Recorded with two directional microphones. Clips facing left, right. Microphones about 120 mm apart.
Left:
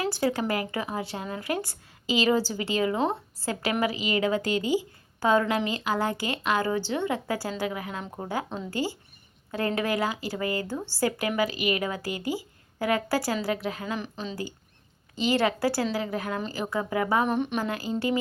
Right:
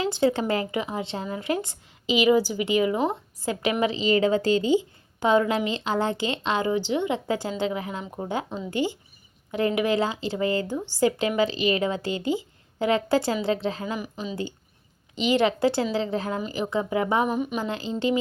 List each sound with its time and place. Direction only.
0.0 s speech: 25° right (ahead or behind)
13.9 s speech: 10° right (ahead or behind)
17.2 s speech: 5° right (ahead or behind)
17.6 s speech: 25° right (ahead or behind)